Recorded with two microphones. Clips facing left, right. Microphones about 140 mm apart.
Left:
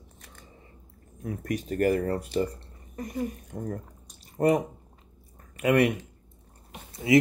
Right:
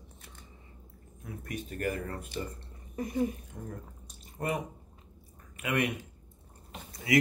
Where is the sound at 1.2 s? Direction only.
40° left (ahead or behind).